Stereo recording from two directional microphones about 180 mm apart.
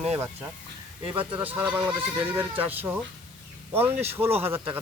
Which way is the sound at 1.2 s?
30° right (ahead or behind).